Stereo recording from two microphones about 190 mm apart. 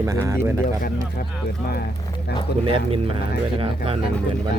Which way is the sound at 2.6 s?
30° right (ahead or behind).